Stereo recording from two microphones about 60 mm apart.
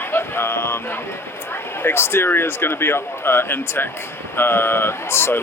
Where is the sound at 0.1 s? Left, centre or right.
Left.